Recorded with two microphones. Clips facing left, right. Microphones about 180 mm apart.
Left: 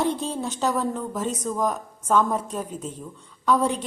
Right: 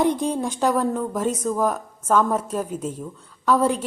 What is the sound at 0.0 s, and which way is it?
A woman's voice, 15° right (ahead or behind).